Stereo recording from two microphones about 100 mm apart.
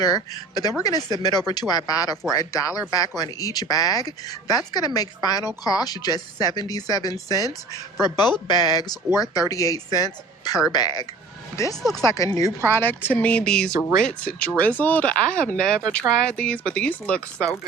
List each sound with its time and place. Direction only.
0.0 s speech: 40° left (ahead or behind)
8.0 s a woman's voice: 45° left (ahead or behind); by 17.6 s 10° left (ahead or behind)